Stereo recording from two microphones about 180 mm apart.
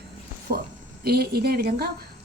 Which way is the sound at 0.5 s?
55° right (ahead or behind).